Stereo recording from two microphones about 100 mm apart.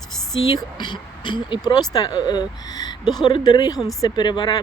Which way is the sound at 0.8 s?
50° left (ahead or behind).